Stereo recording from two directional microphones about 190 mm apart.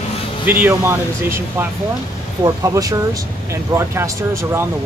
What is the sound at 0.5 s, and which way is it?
Speech, 10° right (ahead or behind).